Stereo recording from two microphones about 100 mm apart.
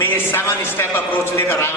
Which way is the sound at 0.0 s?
20° left (ahead or behind).